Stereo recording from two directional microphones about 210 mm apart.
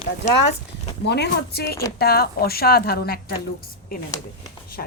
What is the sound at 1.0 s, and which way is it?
A woman's voice, 50° left (ahead or behind).